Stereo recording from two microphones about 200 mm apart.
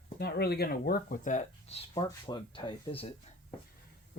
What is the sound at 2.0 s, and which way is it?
Speech, 20° left (ahead or behind).